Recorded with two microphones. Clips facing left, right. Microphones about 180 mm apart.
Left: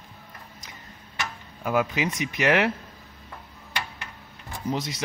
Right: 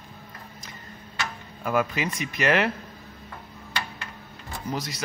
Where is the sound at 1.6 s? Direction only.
15° left (ahead or behind).